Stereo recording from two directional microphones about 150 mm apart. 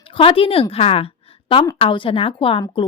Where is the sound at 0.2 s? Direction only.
40° left (ahead or behind).